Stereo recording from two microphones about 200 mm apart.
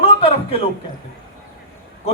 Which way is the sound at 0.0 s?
30° left (ahead or behind).